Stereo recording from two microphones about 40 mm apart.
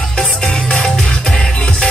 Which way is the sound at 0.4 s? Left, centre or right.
Left.